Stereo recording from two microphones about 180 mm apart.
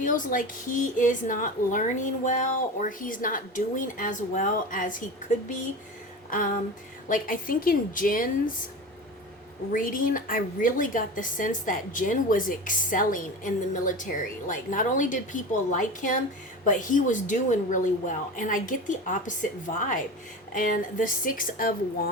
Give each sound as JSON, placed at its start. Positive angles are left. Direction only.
{"t": 0.0, "sound": "a woman's voice", "side_deg": 45}
{"t": 7.1, "sound": "a woman's voice", "side_deg": 50}
{"t": 9.7, "sound": "a woman's voice", "side_deg": 50}